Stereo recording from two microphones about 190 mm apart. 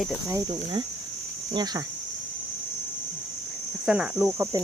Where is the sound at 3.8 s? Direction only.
5° right (ahead or behind).